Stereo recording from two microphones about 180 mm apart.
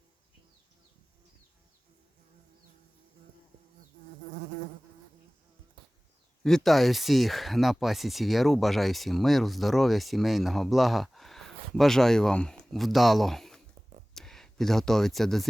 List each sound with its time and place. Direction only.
6.4 s speech: centre (ahead or behind)